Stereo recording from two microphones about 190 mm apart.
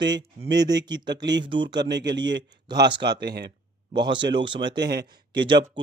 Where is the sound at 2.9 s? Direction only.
25° right (ahead or behind).